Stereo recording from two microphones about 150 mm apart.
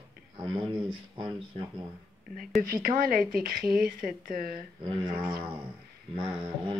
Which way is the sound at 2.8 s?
75° right (ahead or behind).